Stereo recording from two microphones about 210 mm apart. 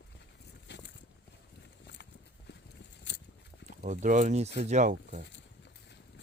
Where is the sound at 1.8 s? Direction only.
55° left (ahead or behind).